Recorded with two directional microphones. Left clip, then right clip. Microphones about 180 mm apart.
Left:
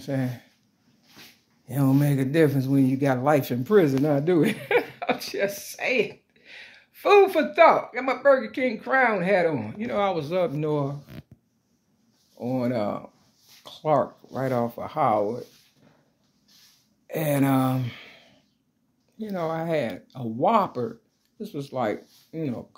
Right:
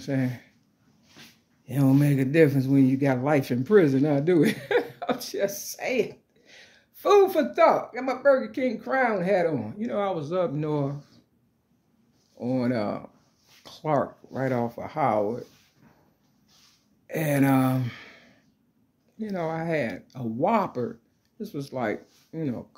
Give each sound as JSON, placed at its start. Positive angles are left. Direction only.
{"t": 0.0, "sound": "speech", "side_deg": -30}
{"t": 1.7, "sound": "speech", "side_deg": -30}
{"t": 12.4, "sound": "speech", "side_deg": -20}
{"t": 17.1, "sound": "speech", "side_deg": -20}